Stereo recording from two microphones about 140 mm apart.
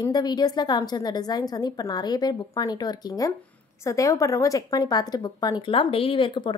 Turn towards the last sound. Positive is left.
turn(degrees=35)  # may be behind; listen again after turning